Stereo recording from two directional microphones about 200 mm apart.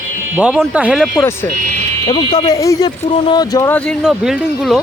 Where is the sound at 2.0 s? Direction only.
25° left (ahead or behind).